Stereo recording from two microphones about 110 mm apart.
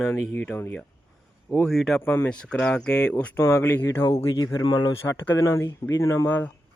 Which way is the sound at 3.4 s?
25° left (ahead or behind).